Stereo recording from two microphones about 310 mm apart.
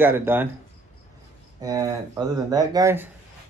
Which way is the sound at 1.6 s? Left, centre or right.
Centre.